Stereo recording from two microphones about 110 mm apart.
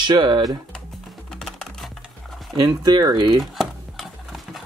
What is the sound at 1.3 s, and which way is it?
Music, 5° left (ahead or behind).